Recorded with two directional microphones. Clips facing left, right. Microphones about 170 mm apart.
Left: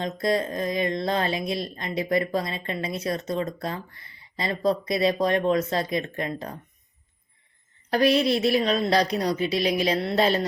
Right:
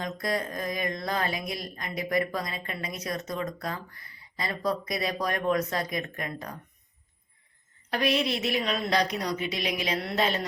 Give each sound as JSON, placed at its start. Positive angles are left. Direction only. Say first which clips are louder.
{"t": 0.0, "sound": "speech", "louder": "left 6 dB", "side_deg": 25}
{"t": 7.9, "sound": "a woman's voice", "louder": "left 6 dB", "side_deg": 35}